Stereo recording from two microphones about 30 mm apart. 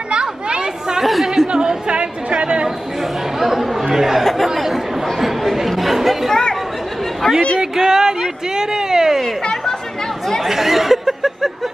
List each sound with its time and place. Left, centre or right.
0.1 s chatter: right
1.5 s speech: right
1.9 s a woman's voice: right
3.0 s speech: centre
4.2 s speech: centre
5.2 s chatter: centre
7.2 s speech: left
7.7 s speech: right
9.4 s chatter: left
10.4 s speech: centre